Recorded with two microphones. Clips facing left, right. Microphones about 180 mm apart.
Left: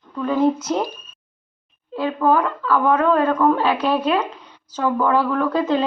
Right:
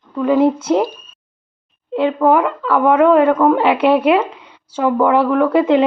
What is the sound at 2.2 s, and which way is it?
A woman's voice, 20° right (ahead or behind).